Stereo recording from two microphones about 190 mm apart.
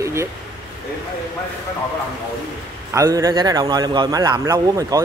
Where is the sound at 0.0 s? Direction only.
15° right (ahead or behind).